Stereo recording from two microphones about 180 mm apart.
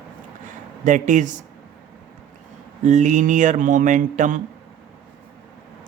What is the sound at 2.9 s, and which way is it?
Speech, 40° right (ahead or behind).